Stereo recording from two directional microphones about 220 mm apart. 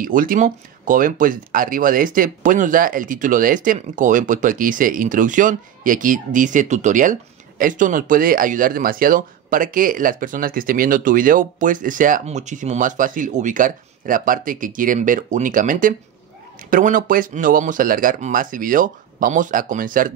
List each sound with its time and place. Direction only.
0.0 s speech: 40° right (ahead or behind)